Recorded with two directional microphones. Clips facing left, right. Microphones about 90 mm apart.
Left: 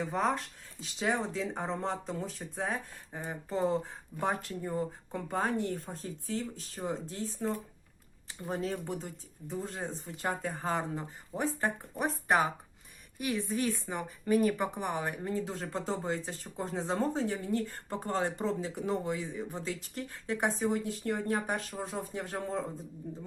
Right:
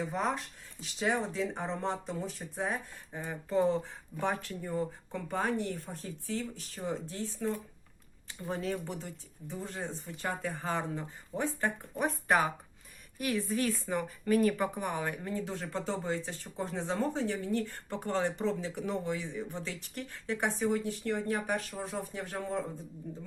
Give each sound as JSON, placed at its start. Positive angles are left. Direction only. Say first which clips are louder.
{"t": 0.8, "sound": "speech", "louder": "even", "side_deg": 35}
{"t": 3.1, "sound": "speech", "louder": "right 2 dB", "side_deg": 25}
{"t": 13.2, "sound": "speech", "louder": "right 1 dB", "side_deg": 15}
{"t": 14.8, "sound": "speech", "louder": "even", "side_deg": 25}